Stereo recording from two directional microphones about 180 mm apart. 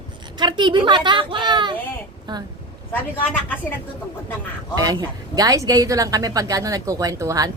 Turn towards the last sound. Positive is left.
turn(degrees=-20)  # may be behind; listen again after turning